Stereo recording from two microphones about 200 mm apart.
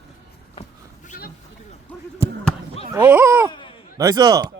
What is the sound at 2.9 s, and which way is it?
Speech, 10° right (ahead or behind).